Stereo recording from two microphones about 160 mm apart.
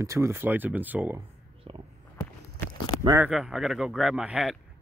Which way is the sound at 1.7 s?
35° right (ahead or behind).